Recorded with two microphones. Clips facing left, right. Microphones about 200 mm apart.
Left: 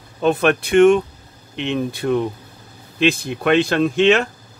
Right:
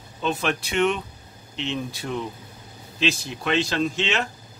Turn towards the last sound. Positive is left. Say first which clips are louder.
# left 10 dB
turn(degrees=55)  # may be behind; listen again after turning